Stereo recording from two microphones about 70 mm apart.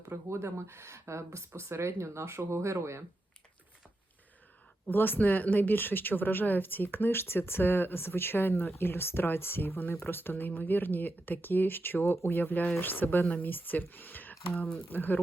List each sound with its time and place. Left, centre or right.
0.0 s speech: right
4.9 s speech: left